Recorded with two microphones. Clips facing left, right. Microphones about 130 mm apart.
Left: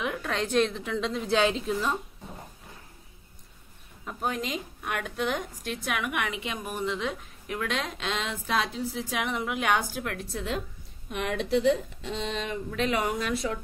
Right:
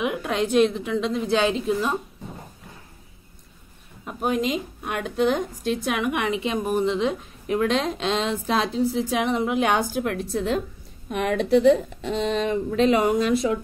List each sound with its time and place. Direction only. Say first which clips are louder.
0.0 s a woman's voice: right 6 dB; 15° right (ahead or behind)
4.0 s a woman's voice: right 7 dB; 15° right (ahead or behind)
10.3 s a woman's voice: right 8 dB; 40° right (ahead or behind)
11.1 s a woman's voice: right 7 dB; 55° right (ahead or behind); by 13.6 s 20° right (ahead or behind)